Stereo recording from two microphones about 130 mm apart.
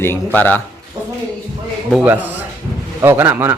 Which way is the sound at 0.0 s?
15° left (ahead or behind).